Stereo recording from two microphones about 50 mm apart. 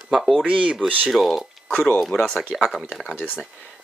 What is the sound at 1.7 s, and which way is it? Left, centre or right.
Speech, centre.